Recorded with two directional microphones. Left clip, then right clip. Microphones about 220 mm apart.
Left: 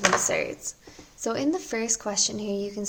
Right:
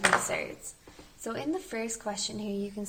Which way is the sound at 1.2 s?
50° left (ahead or behind).